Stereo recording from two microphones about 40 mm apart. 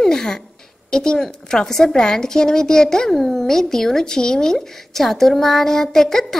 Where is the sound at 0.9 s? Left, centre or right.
Centre.